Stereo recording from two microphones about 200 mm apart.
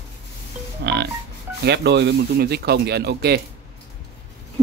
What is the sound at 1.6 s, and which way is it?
Speech, 60° right (ahead or behind).